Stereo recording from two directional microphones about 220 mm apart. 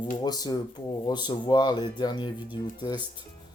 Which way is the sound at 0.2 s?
15° left (ahead or behind).